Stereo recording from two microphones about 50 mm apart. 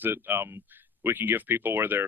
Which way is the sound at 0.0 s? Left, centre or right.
Right.